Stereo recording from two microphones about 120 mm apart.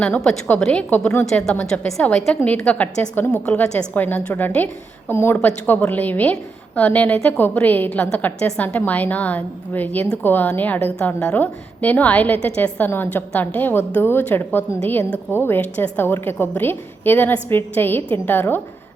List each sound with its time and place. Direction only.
0.0 s a woman's voice: 5° left (ahead or behind)
1.2 s a woman's voice: 5° left (ahead or behind)
1.5 s a woman's voice: 15° left (ahead or behind)